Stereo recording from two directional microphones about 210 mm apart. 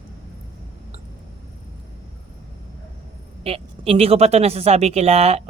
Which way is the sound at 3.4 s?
30° right (ahead or behind).